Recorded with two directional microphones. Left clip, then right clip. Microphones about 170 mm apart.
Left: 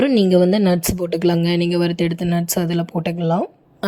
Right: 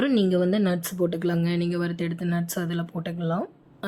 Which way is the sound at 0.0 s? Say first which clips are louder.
Left 8 dB; 40° left (ahead or behind).